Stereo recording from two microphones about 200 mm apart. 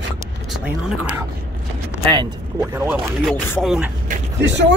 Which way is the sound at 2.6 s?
10° right (ahead or behind).